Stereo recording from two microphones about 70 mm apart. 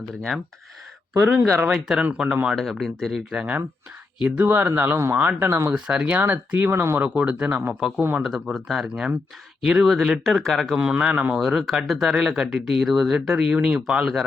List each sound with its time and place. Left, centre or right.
1.3 s speech: right
2.2 s speech: right
2.6 s speech: centre
3.3 s speech: right
5.7 s speech: centre
7.1 s speech: centre
7.8 s speech: centre
10.8 s speech: centre
11.3 s speech: centre